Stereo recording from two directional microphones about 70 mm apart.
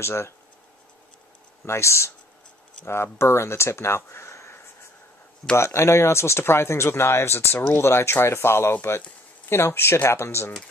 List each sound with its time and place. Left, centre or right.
0.0 s speech: left
1.7 s speech: left
5.6 s speech: left